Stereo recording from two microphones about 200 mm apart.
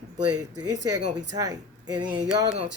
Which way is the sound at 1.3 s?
20° right (ahead or behind).